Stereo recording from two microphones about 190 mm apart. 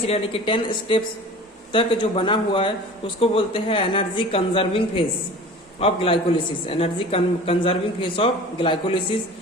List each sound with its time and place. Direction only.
0.1 s a man's voice: 30° left (ahead or behind)